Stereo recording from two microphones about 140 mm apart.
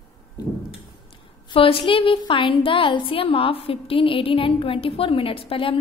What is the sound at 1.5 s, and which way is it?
A woman's voice, 40° left (ahead or behind).